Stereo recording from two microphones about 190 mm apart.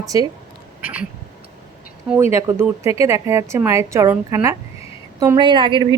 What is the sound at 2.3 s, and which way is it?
A woman's voice, 10° right (ahead or behind).